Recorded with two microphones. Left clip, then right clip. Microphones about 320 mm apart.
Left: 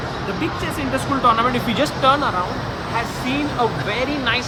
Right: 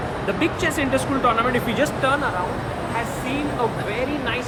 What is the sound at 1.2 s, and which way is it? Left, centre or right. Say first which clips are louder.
Speech: left 5 dB; centre.